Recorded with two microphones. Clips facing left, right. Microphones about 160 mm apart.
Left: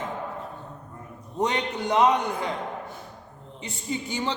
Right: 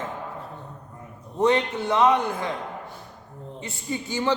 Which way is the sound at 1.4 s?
15° left (ahead or behind).